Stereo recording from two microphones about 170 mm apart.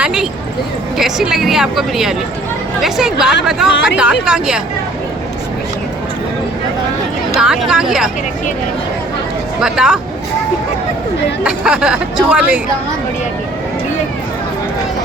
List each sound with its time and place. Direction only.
0.0 s a woman's voice: 5° right (ahead or behind)
7.3 s a woman's voice: 5° right (ahead or behind)
9.6 s a woman's voice: 5° right (ahead or behind)
11.4 s a woman's voice: 5° right (ahead or behind)